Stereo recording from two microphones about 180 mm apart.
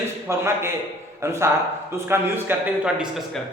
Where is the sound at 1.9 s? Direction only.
10° right (ahead or behind).